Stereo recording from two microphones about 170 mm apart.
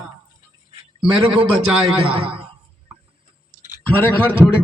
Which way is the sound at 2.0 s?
30° right (ahead or behind).